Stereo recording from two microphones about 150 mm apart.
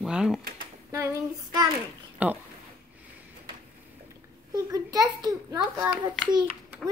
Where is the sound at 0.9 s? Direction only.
25° right (ahead or behind).